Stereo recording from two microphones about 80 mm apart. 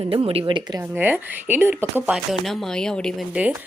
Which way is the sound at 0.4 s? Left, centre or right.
Right.